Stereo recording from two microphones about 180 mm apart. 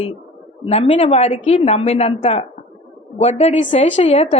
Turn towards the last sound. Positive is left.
turn(degrees=35)  # may be behind; listen again after turning